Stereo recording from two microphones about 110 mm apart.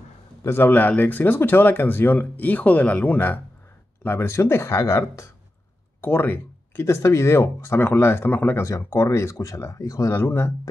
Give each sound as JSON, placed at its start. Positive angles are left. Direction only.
{"t": 0.4, "sound": "speech", "side_deg": 20}